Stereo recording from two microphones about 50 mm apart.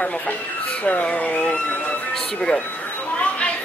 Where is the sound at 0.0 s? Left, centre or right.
Left.